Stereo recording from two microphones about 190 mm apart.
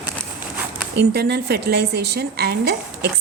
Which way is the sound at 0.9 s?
60° right (ahead or behind).